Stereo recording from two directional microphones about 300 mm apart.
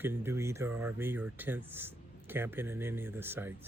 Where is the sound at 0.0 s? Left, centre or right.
Centre.